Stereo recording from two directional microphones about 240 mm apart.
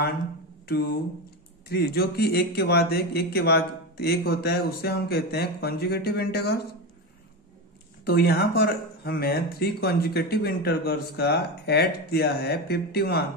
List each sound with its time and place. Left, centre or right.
1.7 s speech: left
8.0 s speech: left